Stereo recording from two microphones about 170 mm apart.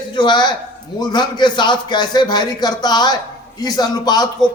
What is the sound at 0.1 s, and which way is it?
Speech, 25° left (ahead or behind).